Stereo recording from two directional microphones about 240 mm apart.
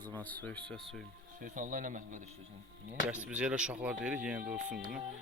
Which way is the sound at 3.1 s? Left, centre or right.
Centre.